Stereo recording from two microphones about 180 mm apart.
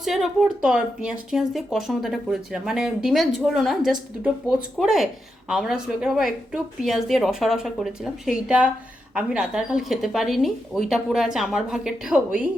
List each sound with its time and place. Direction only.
0.0 s speech: centre (ahead or behind)